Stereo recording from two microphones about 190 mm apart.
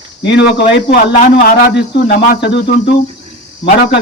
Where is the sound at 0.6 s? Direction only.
45° left (ahead or behind); by 2.9 s 65° left (ahead or behind).